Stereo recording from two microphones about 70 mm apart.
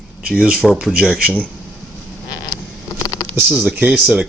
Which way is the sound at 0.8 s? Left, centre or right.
Centre.